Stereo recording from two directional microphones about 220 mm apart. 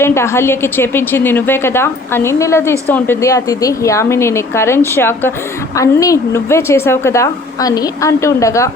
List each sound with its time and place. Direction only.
0.0 s a woman's voice: 10° left (ahead or behind)